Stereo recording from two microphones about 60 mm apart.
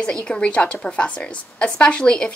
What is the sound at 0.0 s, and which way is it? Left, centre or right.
A woman's voice, centre.